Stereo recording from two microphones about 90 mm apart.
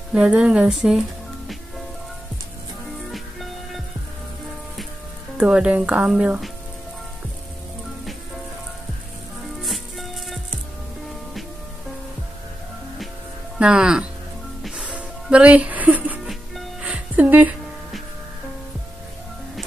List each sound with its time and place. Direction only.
0.1 s speech: 10° right (ahead or behind)
3.1 s music: centre (ahead or behind)
5.5 s speech: 10° right (ahead or behind)
9.6 s music: centre (ahead or behind)
13.6 s speech: 10° right (ahead or behind)
14.8 s music: 15° right (ahead or behind)